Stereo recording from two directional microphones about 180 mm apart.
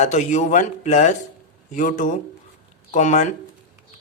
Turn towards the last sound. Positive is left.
turn(degrees=40)  # may be behind; listen again after turning